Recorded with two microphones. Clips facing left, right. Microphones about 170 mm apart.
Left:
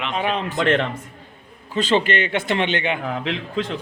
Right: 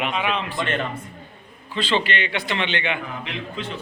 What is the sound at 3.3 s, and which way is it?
Speech, 90° left.